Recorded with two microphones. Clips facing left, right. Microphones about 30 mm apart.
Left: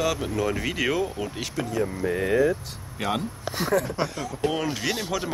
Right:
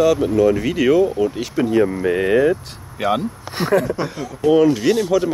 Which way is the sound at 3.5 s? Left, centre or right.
Right.